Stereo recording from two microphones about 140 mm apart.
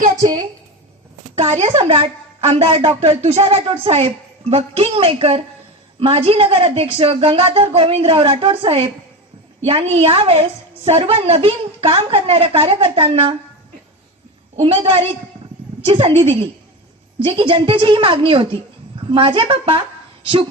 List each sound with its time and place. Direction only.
1.4 s a woman's voice: 50° right (ahead or behind)
14.5 s a woman's voice: 45° right (ahead or behind)